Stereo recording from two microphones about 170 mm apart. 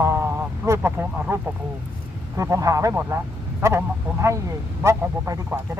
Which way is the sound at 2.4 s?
20° right (ahead or behind).